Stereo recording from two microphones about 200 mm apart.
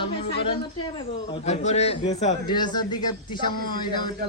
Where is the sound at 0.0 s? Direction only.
25° left (ahead or behind).